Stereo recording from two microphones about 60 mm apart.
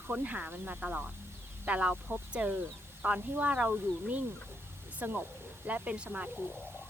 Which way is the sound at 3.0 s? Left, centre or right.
Right.